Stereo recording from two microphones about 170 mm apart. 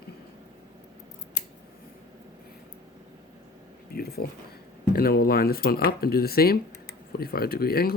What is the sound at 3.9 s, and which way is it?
Speech, 65° left (ahead or behind).